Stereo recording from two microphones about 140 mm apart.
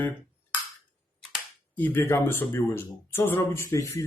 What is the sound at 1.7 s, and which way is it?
Speech, 15° left (ahead or behind).